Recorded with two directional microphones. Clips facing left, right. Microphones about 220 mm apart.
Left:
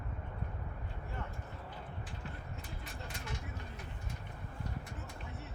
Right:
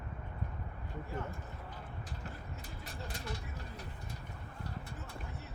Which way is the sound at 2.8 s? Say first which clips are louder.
Right 2 dB; 35° right (ahead or behind).